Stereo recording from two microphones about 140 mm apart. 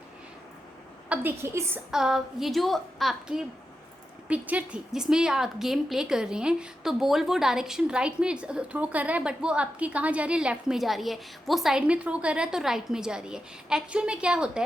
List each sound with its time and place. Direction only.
1.1 s a woman's voice: 15° right (ahead or behind)
1.9 s a woman's voice: 5° right (ahead or behind)